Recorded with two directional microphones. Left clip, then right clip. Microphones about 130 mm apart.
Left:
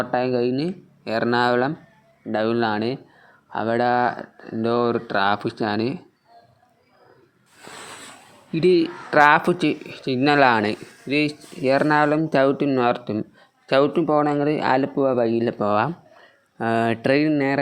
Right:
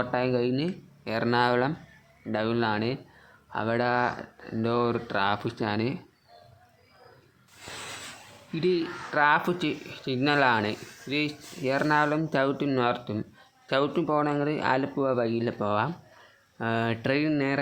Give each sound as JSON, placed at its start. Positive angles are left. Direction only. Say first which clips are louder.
{"t": 0.0, "sound": "speech", "louder": "left 5 dB", "side_deg": 30}
{"t": 8.5, "sound": "speech", "louder": "left 9 dB", "side_deg": 55}
{"t": 9.4, "sound": "speech", "louder": "left 7 dB", "side_deg": 45}